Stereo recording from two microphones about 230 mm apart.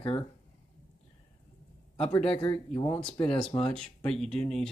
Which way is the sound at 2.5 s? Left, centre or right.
Centre.